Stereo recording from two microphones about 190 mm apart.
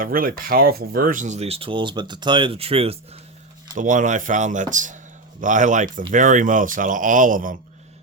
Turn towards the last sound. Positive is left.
turn(degrees=-45)  # may be behind; listen again after turning